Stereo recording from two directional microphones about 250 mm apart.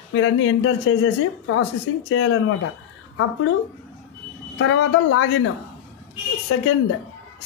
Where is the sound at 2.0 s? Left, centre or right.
Left.